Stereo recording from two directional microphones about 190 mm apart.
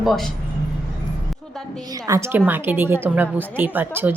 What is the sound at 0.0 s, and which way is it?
Speech, centre (ahead or behind).